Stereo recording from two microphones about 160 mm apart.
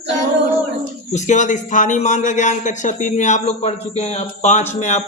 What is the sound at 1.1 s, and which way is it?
A man's voice, 50° left (ahead or behind).